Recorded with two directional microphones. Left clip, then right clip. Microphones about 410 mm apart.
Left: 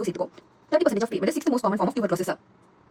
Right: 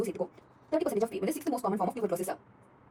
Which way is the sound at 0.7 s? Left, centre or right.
Centre.